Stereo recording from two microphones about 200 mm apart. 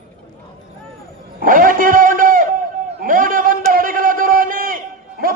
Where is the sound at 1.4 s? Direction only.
45° right (ahead or behind).